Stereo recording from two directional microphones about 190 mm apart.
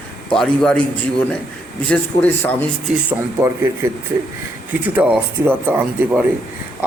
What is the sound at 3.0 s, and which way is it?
Speech, 15° right (ahead or behind).